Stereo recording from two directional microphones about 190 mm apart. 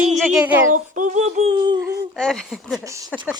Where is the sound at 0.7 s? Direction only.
40° right (ahead or behind); by 1.7 s 25° right (ahead or behind).